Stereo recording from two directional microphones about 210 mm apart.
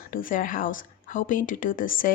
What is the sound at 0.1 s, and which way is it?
A woman's voice, 40° left (ahead or behind).